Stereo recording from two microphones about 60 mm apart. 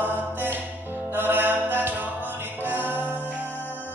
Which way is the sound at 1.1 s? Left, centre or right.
Right.